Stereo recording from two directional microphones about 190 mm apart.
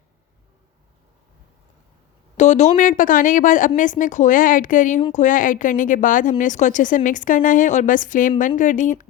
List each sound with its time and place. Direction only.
2.4 s a woman's voice: 40° left (ahead or behind)